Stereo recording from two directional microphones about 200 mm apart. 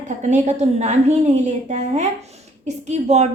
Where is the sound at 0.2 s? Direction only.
35° right (ahead or behind).